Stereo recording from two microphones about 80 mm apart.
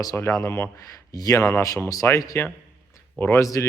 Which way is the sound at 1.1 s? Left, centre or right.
Left.